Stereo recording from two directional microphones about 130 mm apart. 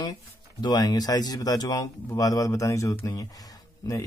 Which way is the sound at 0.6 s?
30° left (ahead or behind).